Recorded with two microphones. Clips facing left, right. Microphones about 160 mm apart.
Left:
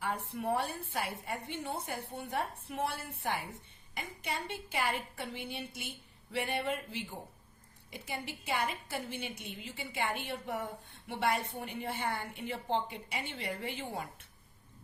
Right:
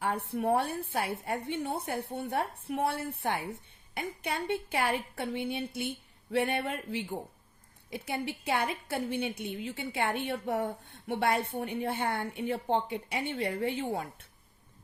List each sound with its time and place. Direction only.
0.0 s a woman's voice: 55° right (ahead or behind)